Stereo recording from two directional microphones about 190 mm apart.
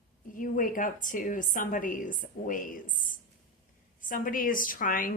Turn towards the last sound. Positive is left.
turn(degrees=45)  # may be behind; listen again after turning